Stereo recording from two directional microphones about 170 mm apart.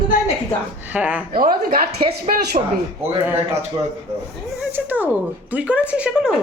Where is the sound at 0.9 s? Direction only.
10° right (ahead or behind).